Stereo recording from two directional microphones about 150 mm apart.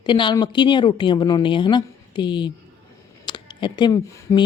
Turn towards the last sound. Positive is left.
turn(degrees=30)  # may be behind; listen again after turning